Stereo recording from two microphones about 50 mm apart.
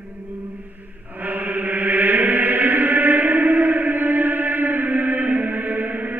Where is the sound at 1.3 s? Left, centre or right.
Right.